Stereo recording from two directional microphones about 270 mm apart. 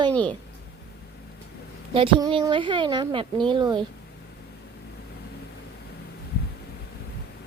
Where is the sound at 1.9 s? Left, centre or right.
Centre.